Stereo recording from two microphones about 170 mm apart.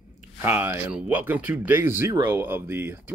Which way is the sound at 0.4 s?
15° right (ahead or behind).